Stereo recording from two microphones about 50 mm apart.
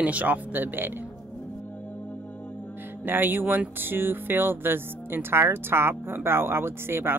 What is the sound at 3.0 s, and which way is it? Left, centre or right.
Speech, right.